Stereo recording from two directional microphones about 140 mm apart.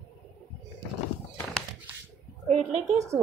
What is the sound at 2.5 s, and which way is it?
Speech, 55° right (ahead or behind).